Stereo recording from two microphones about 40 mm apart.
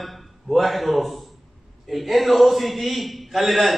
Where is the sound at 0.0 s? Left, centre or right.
Centre.